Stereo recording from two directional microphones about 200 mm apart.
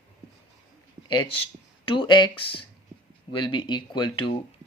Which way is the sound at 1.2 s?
25° left (ahead or behind).